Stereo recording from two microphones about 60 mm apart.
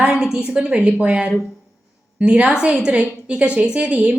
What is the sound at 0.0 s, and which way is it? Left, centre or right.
A woman's voice, centre.